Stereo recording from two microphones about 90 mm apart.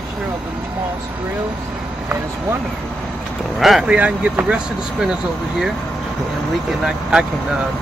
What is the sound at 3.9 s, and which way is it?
Speech, 15° right (ahead or behind).